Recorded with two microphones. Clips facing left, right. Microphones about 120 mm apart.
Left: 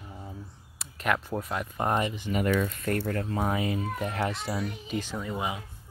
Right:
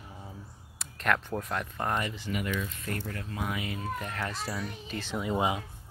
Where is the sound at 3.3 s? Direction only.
35° left (ahead or behind).